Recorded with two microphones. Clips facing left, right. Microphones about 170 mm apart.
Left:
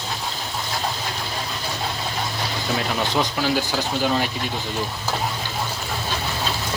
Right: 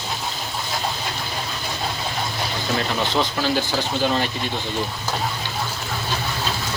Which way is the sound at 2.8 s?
10° left (ahead or behind).